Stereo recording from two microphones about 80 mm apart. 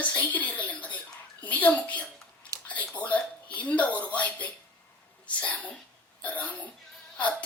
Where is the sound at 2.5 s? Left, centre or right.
Right.